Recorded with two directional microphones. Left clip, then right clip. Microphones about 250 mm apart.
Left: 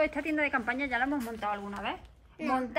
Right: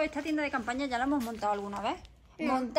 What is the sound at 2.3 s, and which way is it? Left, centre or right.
Speech, right.